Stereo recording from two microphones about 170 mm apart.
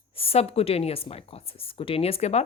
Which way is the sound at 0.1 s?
35° left (ahead or behind).